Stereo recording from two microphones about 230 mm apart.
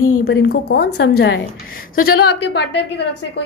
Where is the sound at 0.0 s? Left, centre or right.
Left.